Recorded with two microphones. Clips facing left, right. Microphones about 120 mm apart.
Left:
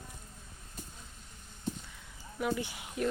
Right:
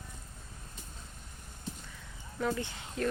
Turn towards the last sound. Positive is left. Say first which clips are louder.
# even
turn(degrees=15)  # may be behind; listen again after turning